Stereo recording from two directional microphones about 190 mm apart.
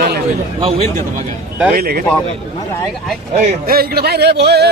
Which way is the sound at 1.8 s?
50° right (ahead or behind).